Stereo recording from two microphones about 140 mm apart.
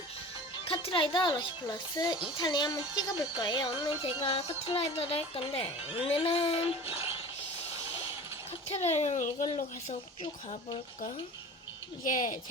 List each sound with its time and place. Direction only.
0.7 s speech: 40° left (ahead or behind)
8.7 s speech: 50° left (ahead or behind)
12.0 s speech: 70° left (ahead or behind)